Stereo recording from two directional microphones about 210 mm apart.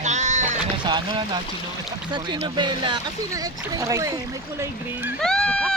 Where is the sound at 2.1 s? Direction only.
20° right (ahead or behind).